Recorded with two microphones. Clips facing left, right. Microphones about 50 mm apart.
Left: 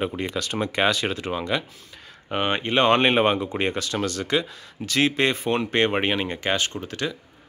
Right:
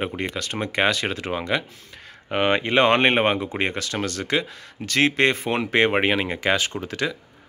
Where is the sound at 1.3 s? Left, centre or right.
Right.